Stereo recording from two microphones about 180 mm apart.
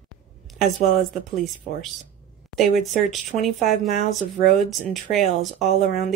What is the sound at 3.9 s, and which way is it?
Speech, 50° left (ahead or behind).